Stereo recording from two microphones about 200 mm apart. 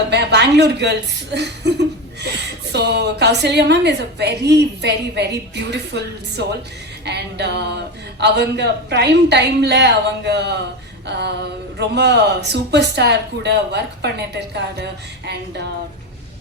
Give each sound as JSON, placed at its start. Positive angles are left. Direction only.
{"t": 0.1, "sound": "a woman's voice", "side_deg": -60}